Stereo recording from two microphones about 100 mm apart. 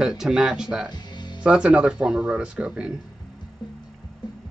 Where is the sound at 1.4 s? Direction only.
10° right (ahead or behind).